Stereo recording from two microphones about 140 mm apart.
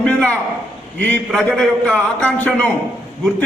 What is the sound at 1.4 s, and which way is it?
A man's voice, 5° left (ahead or behind).